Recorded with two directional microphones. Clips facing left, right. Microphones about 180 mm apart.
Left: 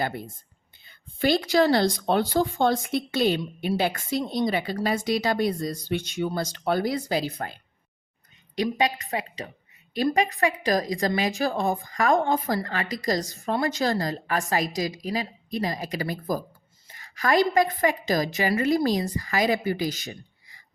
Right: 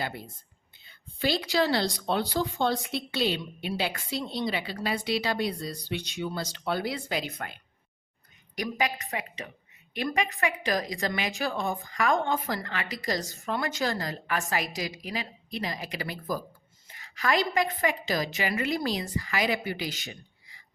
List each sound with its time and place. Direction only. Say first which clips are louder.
0.0 s a woman's voice: left 5 dB; 50° left (ahead or behind)
16.9 s a sound: left 4 dB; 45° left (ahead or behind)
17.7 s a woman's voice: left 5 dB; 40° left (ahead or behind)